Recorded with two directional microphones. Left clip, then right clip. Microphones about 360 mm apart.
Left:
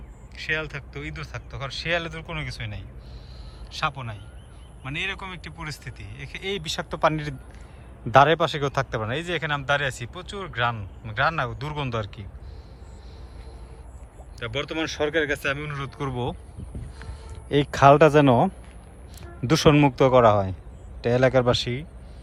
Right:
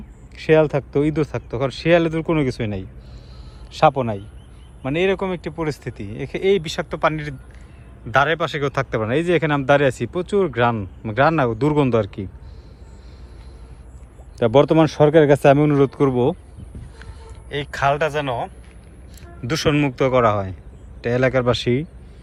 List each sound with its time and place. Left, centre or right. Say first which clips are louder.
0.3 s speech: right 13 dB; centre
14.3 s speech: right 14 dB; centre
17.5 s speech: left 4 dB; centre